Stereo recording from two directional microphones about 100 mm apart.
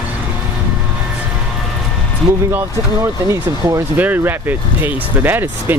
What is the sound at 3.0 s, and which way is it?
Speech, 30° right (ahead or behind).